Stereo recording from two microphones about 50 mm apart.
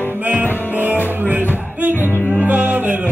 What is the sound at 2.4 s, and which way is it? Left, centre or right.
Music, right.